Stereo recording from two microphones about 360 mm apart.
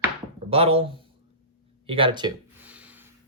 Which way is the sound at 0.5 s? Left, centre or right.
Centre.